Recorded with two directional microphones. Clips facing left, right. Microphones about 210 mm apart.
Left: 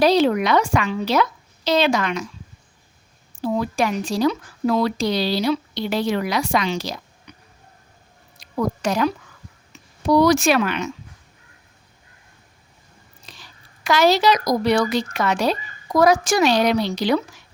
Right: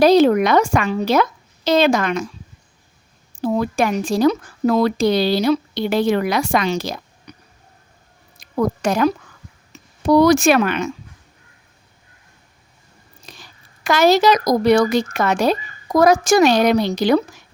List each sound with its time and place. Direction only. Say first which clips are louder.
0.0 s a woman's voice: right 4 dB; 45° right (ahead or behind)
3.4 s speech: right 3 dB; 50° right (ahead or behind)
8.4 s speech: right 4 dB; 50° right (ahead or behind)
9.7 s a sound: right 3 dB; 40° right (ahead or behind)
10.1 s speech: right 3 dB; 50° right (ahead or behind)
13.2 s speech: right 4 dB; 45° right (ahead or behind)